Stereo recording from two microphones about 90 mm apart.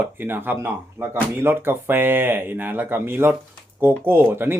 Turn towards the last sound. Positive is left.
turn(degrees=-25)  # may be behind; listen again after turning